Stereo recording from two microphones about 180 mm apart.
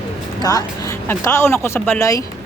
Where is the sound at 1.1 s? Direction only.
15° left (ahead or behind).